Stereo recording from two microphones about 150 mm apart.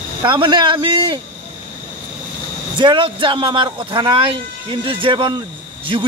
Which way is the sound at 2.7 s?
35° right (ahead or behind).